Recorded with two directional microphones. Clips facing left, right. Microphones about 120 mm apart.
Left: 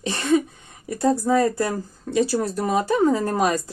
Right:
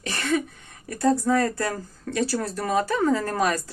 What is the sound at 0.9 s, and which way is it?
Speech, 15° left (ahead or behind).